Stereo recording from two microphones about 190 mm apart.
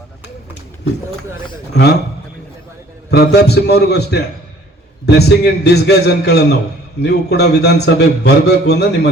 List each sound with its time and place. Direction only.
1.7 s a man's voice: 60° left (ahead or behind)
3.1 s a man's voice: 60° left (ahead or behind)